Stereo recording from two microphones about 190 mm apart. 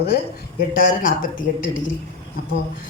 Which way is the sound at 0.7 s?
50° left (ahead or behind).